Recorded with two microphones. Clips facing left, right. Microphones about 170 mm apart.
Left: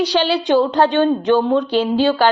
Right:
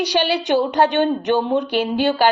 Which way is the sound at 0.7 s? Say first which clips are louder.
Left 2 dB; 15° right (ahead or behind).